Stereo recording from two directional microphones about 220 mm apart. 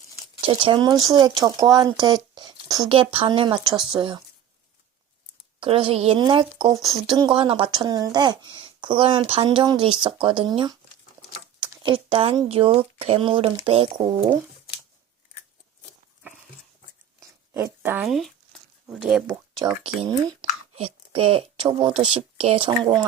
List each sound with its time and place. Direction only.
0.4 s speech: 20° right (ahead or behind)
5.5 s speech: 25° right (ahead or behind)
17.2 s a sound: 10° right (ahead or behind)
18.9 s speech: centre (ahead or behind)
19.8 s speech: 25° right (ahead or behind)